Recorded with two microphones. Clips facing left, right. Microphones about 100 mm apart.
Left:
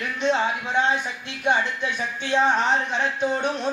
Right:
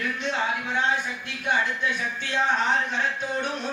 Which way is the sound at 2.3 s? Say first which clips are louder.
Left 6 dB; 20° left (ahead or behind).